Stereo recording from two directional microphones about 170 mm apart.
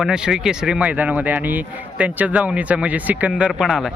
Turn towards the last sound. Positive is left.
turn(degrees=0)  # may be behind; listen again after turning